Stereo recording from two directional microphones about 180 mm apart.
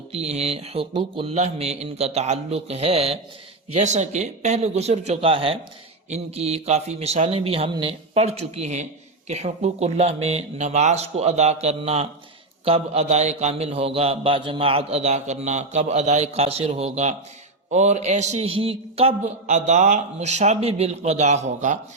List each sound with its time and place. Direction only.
0.1 s a man's voice: 35° right (ahead or behind)